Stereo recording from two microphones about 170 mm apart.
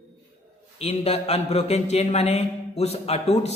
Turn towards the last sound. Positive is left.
turn(degrees=40)  # may be behind; listen again after turning